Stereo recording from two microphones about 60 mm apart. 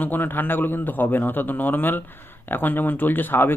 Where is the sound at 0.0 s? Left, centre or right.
Left.